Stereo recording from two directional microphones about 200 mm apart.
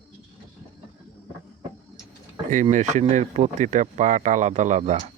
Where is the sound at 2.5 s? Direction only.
40° right (ahead or behind).